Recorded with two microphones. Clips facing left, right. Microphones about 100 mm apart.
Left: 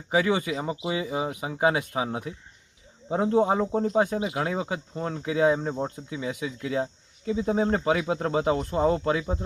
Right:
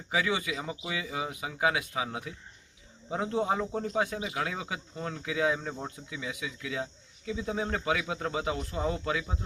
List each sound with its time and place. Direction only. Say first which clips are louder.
0.1 s speech: left 6 dB; 40° left (ahead or behind)